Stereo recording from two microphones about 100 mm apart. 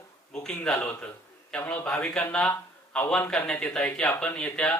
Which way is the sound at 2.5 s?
25° left (ahead or behind).